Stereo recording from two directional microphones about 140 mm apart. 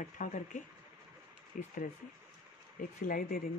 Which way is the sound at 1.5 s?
65° left (ahead or behind).